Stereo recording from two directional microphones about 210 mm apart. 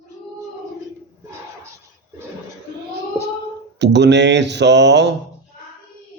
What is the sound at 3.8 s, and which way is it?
Speech, 55° right (ahead or behind).